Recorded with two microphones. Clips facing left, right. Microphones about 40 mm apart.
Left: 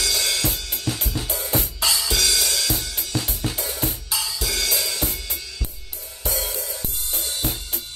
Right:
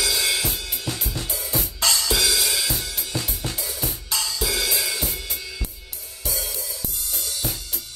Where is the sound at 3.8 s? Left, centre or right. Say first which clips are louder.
Right 2 dB; centre.